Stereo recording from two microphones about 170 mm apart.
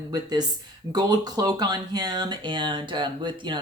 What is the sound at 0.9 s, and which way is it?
Speech, 25° right (ahead or behind).